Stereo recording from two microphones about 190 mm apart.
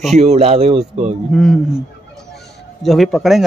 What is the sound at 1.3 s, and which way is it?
Speech, 5° left (ahead or behind).